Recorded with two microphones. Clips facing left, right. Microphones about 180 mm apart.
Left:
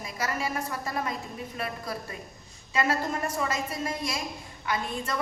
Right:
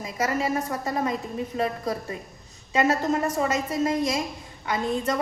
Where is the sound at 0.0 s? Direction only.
25° right (ahead or behind).